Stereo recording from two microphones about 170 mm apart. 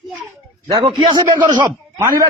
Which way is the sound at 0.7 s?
25° right (ahead or behind).